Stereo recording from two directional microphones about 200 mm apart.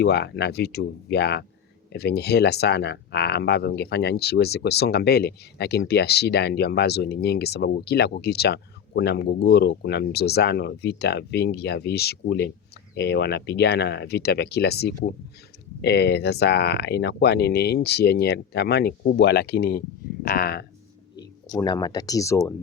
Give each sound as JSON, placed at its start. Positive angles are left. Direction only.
{"t": 0.0, "sound": "speech", "side_deg": 55}
{"t": 21.5, "sound": "speech", "side_deg": 20}